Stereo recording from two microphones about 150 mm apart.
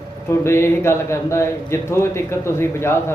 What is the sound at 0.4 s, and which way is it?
A man's voice, 15° left (ahead or behind).